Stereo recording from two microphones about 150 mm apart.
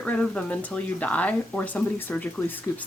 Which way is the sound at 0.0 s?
10° left (ahead or behind).